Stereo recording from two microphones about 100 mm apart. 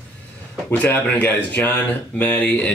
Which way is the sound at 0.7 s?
15° left (ahead or behind).